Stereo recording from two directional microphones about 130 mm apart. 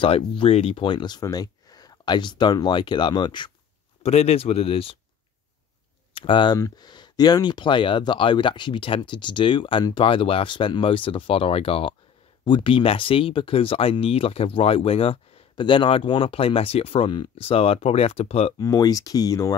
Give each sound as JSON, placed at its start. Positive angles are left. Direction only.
{"t": 0.4, "sound": "speech", "side_deg": 45}
{"t": 4.0, "sound": "speech", "side_deg": 55}
{"t": 6.1, "sound": "speech", "side_deg": 40}
{"t": 18.6, "sound": "speech", "side_deg": 25}